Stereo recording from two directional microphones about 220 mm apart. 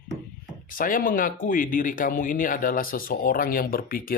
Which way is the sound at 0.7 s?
40° left (ahead or behind).